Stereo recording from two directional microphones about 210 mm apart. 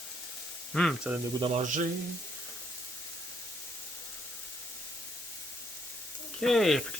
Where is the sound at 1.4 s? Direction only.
35° right (ahead or behind).